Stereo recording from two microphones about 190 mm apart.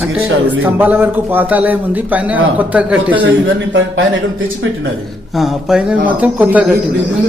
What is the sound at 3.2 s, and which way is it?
Speech, 85° right.